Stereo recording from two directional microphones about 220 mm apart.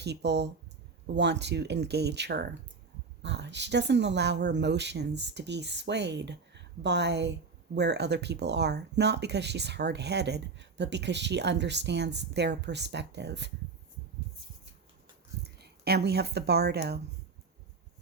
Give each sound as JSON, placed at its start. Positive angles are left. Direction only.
{"t": 0.0, "sound": "speech", "side_deg": -50}
{"t": 15.4, "sound": "speech", "side_deg": -45}